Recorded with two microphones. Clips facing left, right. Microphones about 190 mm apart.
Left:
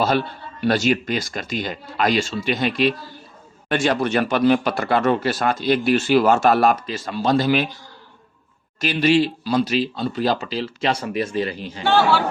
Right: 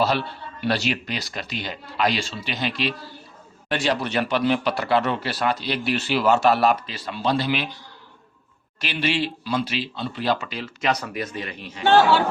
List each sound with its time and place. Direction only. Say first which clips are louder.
0.6 s speech: left 5 dB; 45° left (ahead or behind)
8.8 s speech: left 7 dB; 40° left (ahead or behind)